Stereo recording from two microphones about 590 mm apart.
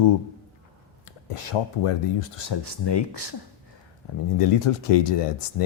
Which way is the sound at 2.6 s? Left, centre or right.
Left.